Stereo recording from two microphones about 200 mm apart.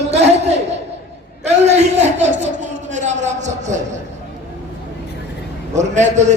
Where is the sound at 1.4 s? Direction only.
35° right (ahead or behind).